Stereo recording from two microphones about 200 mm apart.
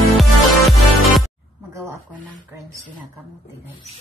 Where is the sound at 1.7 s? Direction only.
15° right (ahead or behind).